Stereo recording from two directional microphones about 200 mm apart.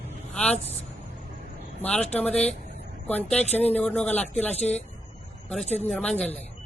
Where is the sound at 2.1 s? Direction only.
5° left (ahead or behind).